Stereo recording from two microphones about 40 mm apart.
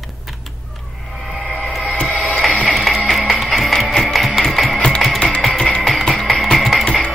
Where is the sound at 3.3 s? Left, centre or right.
Centre.